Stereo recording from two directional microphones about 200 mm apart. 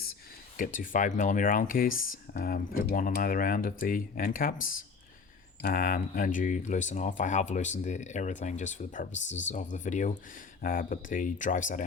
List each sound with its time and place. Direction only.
0.5 s speech: 40° left (ahead or behind)